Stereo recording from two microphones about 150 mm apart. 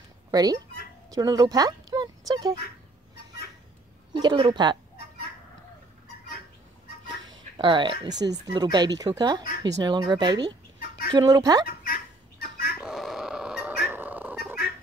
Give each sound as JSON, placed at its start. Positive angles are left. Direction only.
{"t": 0.3, "sound": "speech", "side_deg": -25}
{"t": 4.1, "sound": "speech", "side_deg": -30}
{"t": 7.2, "sound": "speech", "side_deg": -30}
{"t": 11.6, "sound": "fowl", "side_deg": 80}
{"t": 12.8, "sound": "a sound", "side_deg": 0}